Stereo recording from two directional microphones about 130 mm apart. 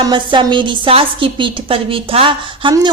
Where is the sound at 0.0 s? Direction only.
35° right (ahead or behind).